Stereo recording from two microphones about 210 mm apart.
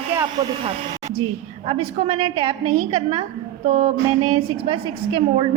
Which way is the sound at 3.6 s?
40° right (ahead or behind).